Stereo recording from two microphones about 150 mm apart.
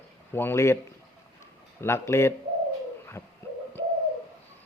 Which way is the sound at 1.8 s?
15° left (ahead or behind).